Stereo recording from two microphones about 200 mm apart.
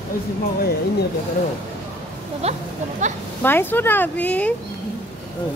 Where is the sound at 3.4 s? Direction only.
10° left (ahead or behind).